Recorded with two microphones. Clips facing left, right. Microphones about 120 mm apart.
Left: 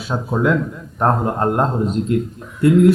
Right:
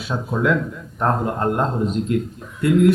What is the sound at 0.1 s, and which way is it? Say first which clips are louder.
Speech: left 2 dB; 25° left (ahead or behind).